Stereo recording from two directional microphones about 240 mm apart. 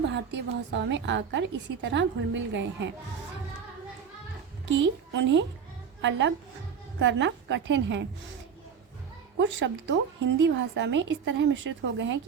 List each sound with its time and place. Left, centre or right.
0.1 s a woman's voice: right
4.6 s a woman's voice: right
9.4 s a woman's voice: right